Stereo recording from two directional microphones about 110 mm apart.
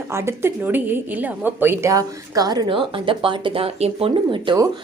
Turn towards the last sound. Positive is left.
turn(degrees=-50)  # may be behind; listen again after turning